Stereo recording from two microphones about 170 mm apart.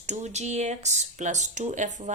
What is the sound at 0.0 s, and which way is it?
Speech, 45° right (ahead or behind).